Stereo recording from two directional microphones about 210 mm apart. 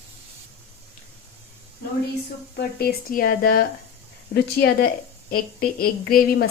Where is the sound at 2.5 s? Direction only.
50° left (ahead or behind).